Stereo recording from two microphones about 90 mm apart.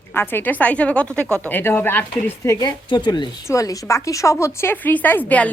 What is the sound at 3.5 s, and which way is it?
A woman's voice, 35° left (ahead or behind).